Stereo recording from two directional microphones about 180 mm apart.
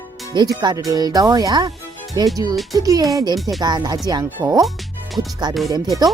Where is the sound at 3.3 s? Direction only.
Centre (ahead or behind).